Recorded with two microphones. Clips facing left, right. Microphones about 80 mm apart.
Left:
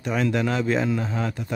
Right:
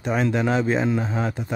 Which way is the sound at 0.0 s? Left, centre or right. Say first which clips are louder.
Right 1 dB; right.